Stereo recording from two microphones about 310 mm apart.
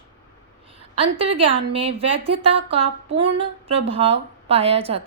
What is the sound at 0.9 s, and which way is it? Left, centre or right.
A woman's voice, centre.